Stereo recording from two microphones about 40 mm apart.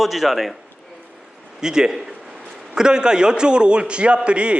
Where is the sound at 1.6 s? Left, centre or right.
Centre.